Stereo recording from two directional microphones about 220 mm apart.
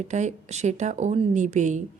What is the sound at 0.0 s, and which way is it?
A woman's voice, 35° right (ahead or behind).